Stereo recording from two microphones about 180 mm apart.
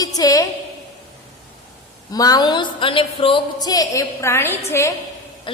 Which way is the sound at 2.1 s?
20° left (ahead or behind).